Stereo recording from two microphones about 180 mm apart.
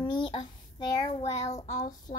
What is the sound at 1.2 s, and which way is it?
Child singing, 40° left (ahead or behind).